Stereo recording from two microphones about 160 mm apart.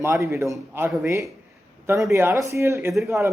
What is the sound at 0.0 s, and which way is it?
Speech, 20° right (ahead or behind).